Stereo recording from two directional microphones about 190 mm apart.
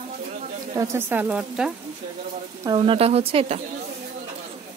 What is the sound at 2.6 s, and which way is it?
Speech, 25° right (ahead or behind).